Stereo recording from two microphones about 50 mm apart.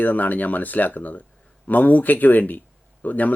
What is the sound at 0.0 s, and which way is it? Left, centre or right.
Speech, left.